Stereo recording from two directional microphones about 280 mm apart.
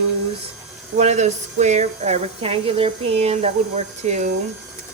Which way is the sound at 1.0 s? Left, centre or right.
Right.